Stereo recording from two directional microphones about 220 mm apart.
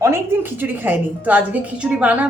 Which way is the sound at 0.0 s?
10° right (ahead or behind).